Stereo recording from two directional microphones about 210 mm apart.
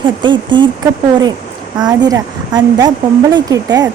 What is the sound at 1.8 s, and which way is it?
Speech, 15° right (ahead or behind).